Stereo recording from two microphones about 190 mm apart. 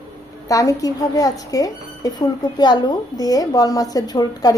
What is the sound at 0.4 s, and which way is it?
Speech, 15° left (ahead or behind).